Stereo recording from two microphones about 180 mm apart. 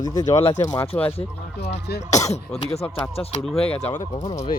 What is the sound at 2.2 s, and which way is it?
Speech, 20° left (ahead or behind).